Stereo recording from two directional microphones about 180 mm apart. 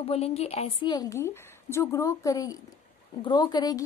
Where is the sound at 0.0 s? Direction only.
35° left (ahead or behind).